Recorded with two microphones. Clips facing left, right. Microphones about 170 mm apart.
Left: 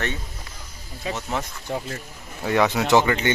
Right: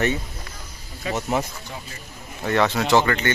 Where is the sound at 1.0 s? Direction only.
30° left (ahead or behind).